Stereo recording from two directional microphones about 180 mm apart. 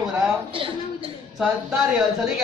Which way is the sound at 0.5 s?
30° right (ahead or behind).